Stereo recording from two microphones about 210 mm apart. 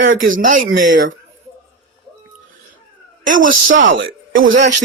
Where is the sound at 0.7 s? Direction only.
40° right (ahead or behind).